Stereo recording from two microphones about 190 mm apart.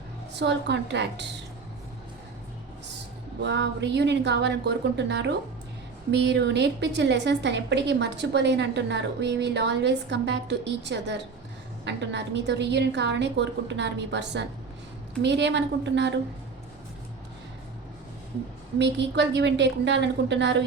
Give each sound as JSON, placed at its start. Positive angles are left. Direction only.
{"t": 0.3, "sound": "a woman's voice", "side_deg": -65}
{"t": 3.4, "sound": "a woman's voice", "side_deg": -65}
{"t": 18.8, "sound": "a woman's voice", "side_deg": -65}